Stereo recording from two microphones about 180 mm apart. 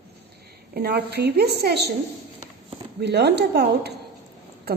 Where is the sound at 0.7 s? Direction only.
65° right (ahead or behind).